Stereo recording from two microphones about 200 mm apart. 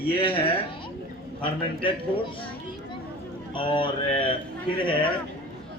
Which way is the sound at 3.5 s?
25° left (ahead or behind).